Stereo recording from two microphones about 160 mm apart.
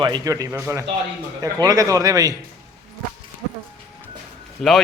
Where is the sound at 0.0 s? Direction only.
25° right (ahead or behind).